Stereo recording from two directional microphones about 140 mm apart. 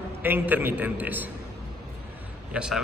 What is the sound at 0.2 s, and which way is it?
A man's voice, 15° right (ahead or behind).